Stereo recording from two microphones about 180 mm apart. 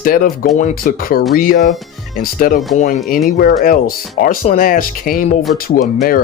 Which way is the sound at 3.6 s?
50° left (ahead or behind).